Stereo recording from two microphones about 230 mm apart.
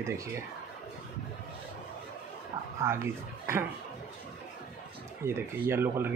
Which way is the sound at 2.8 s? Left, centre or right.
Centre.